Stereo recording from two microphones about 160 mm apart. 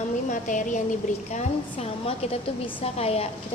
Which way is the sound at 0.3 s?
55° left (ahead or behind).